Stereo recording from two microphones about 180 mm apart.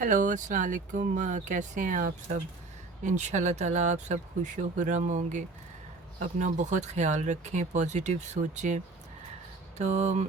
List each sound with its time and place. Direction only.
0.0 s speech: 45° right (ahead or behind)